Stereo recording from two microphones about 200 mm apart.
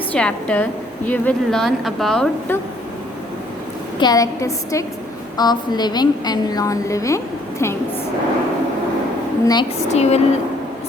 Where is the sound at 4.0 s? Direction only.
20° left (ahead or behind).